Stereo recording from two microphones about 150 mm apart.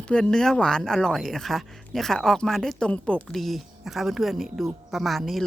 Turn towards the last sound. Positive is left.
turn(degrees=0)  # may be behind; listen again after turning